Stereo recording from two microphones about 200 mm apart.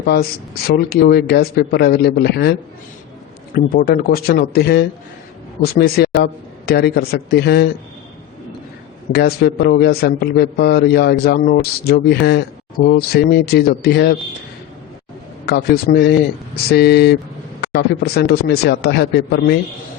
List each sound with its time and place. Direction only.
0.0 s a man's voice: 50° left (ahead or behind)
9.1 s a man's voice: 55° left (ahead or behind)
15.4 s a man's voice: 50° left (ahead or behind)